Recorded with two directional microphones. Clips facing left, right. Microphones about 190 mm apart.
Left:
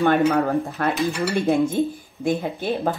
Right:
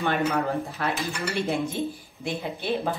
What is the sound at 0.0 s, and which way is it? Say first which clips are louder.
Speech: left 7 dB; 60° left (ahead or behind).